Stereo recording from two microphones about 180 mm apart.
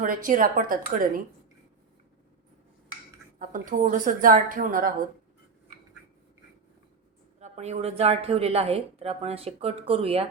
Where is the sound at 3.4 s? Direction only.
50° right (ahead or behind).